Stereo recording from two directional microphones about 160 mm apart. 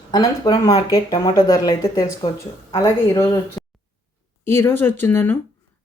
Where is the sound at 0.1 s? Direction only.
25° left (ahead or behind).